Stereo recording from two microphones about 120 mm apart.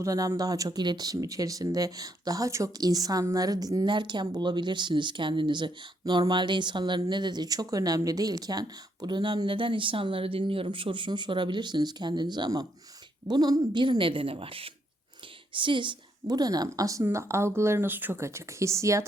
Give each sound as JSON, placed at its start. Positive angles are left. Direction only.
{"t": 0.0, "sound": "a woman's voice", "side_deg": -25}